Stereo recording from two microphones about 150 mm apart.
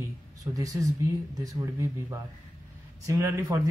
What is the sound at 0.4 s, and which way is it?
Speech, 25° right (ahead or behind).